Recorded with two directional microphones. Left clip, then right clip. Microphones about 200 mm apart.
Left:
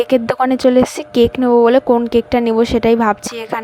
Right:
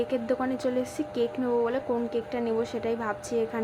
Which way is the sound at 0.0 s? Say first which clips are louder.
Left 14 dB; 45° left (ahead or behind).